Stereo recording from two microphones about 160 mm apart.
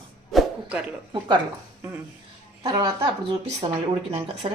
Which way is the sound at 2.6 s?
20° right (ahead or behind).